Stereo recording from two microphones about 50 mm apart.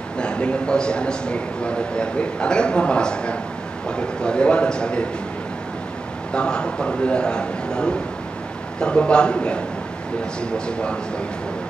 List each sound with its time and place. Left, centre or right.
0.2 s a man's voice: centre
6.3 s a man's voice: centre